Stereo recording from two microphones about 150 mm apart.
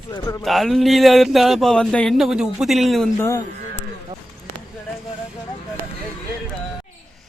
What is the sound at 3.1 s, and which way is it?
Speech, 15° left (ahead or behind).